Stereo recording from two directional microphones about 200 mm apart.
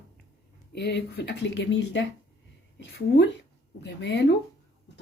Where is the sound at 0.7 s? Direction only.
55° left (ahead or behind).